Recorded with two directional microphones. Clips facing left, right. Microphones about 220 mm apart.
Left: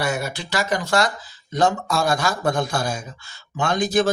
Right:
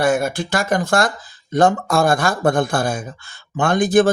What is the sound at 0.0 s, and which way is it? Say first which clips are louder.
Speech: right 7 dB; 50° right (ahead or behind).